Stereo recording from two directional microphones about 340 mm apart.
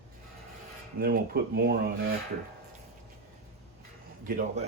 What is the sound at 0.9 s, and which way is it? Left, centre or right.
Speech, right.